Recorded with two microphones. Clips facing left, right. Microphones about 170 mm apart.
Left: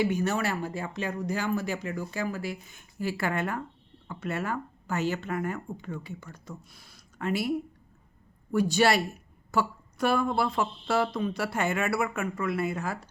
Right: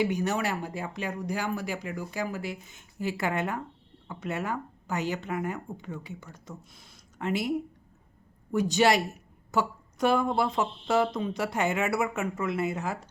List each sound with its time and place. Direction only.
0.0 s speech: 15° right (ahead or behind)
8.5 s a woman's voice: 20° right (ahead or behind)